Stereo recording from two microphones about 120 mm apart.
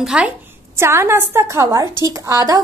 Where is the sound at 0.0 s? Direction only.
10° right (ahead or behind).